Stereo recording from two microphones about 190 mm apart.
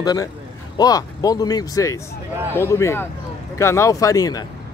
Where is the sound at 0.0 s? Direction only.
20° left (ahead or behind).